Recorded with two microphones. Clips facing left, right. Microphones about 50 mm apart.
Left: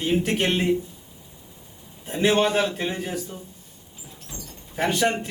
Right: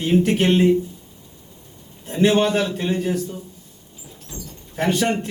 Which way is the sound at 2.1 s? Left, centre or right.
Centre.